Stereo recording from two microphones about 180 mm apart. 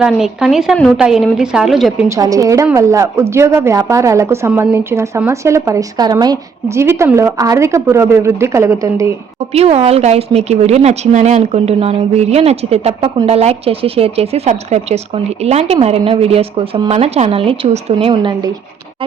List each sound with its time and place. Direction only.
0.0 s a woman's voice: 5° right (ahead or behind)
2.0 s a woman's voice: 20° right (ahead or behind)
9.5 s a woman's voice: 35° right (ahead or behind)